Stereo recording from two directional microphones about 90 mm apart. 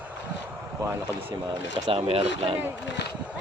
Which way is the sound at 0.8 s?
25° right (ahead or behind).